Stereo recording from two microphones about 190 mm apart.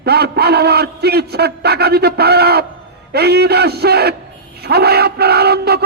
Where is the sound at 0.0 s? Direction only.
55° right (ahead or behind).